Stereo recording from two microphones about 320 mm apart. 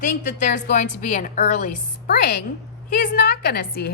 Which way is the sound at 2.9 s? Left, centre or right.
Left.